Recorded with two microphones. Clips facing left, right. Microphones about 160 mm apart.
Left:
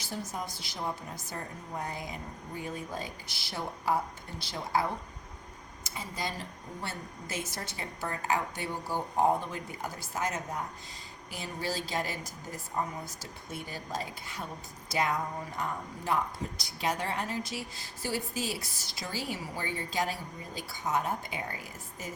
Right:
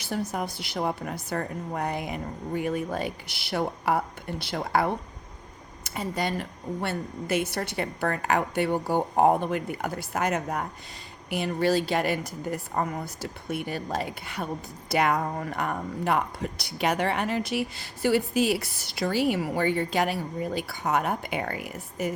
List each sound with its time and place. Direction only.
0.0 s a woman's voice: 65° right (ahead or behind)